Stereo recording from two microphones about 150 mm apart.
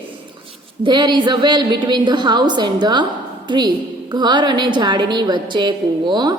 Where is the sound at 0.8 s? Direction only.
30° right (ahead or behind).